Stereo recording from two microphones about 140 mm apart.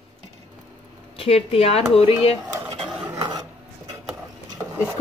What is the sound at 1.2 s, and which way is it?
Speech, 45° left (ahead or behind).